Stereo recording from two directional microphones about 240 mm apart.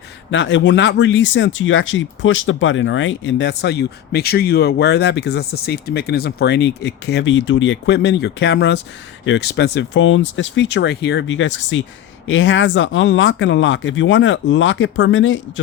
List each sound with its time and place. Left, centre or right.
0.3 s speech: left